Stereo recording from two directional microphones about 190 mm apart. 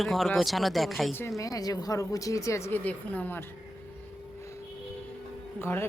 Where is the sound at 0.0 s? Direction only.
Centre (ahead or behind).